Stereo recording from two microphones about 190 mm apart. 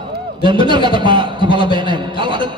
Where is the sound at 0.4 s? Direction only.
25° right (ahead or behind).